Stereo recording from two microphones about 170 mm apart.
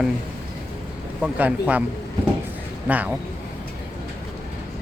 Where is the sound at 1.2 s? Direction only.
5° right (ahead or behind).